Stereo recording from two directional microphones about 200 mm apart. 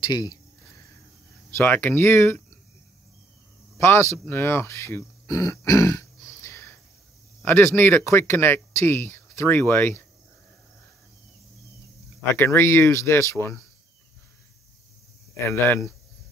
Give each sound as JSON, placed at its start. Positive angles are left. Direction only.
{"t": 0.0, "sound": "a sound", "side_deg": 20}
{"t": 1.5, "sound": "speech", "side_deg": 10}
{"t": 3.7, "sound": "speech", "side_deg": 15}
{"t": 12.4, "sound": "speech", "side_deg": 10}
{"t": 15.3, "sound": "speech", "side_deg": 10}